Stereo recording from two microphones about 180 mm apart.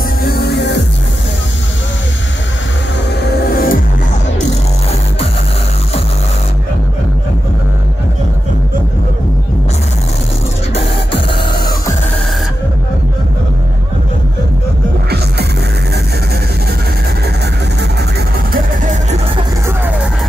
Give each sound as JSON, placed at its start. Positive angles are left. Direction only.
{"t": 0.2, "sound": "music", "side_deg": 60}
{"t": 3.2, "sound": "music", "side_deg": 60}
{"t": 10.7, "sound": "music", "side_deg": 30}
{"t": 18.5, "sound": "music", "side_deg": -45}